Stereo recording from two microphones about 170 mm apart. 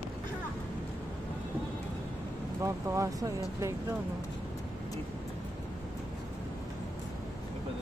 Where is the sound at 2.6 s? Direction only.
20° right (ahead or behind).